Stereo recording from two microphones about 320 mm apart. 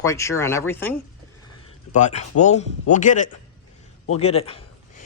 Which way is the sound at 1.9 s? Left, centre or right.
Left.